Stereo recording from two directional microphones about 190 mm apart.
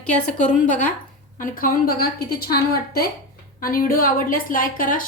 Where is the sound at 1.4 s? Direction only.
50° left (ahead or behind).